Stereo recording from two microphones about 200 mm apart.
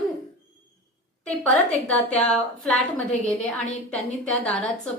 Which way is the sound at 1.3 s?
5° left (ahead or behind).